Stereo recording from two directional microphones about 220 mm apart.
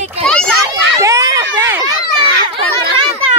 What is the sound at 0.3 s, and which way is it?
Children playing, 5° left (ahead or behind).